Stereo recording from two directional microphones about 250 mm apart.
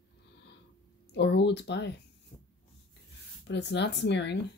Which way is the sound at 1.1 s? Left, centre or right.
Left.